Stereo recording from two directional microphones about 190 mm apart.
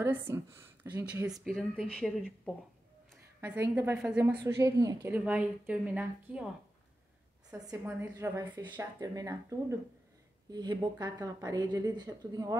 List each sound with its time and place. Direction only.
0.0 s speech: 15° right (ahead or behind)
1.3 s speech: centre (ahead or behind)
3.3 s a woman's voice: 15° right (ahead or behind)
7.5 s a woman's voice: 15° right (ahead or behind)